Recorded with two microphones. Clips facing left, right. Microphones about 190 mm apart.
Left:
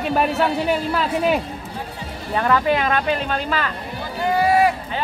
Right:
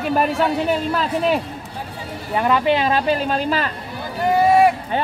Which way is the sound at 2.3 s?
15° right (ahead or behind).